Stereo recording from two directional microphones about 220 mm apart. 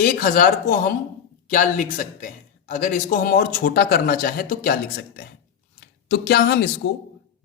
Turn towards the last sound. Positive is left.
turn(degrees=45)  # may be behind; listen again after turning